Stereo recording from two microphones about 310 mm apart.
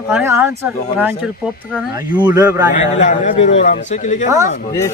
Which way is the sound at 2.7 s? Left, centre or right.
Left.